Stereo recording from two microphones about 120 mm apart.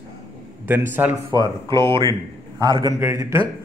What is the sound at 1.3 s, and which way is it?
Speech, 40° right (ahead or behind).